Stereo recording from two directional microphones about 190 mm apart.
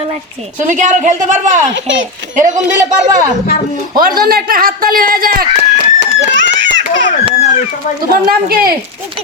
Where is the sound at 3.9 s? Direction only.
50° right (ahead or behind).